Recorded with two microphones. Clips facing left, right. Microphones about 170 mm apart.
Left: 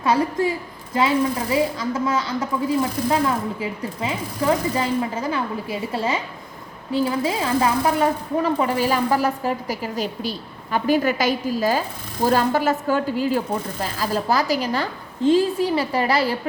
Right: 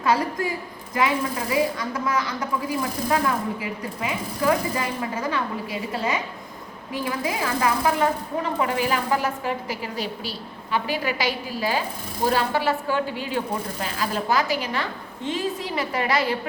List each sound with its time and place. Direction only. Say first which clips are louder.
0.0 s a woman's voice: left 3 dB; 25° left (ahead or behind)
6.9 s a woman's voice: left 6 dB; 30° left (ahead or behind)
8.6 s a woman's voice: left 3 dB; 35° left (ahead or behind)